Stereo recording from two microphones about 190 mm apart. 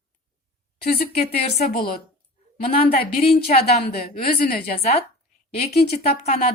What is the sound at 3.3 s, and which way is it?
A woman's voice, 55° left (ahead or behind).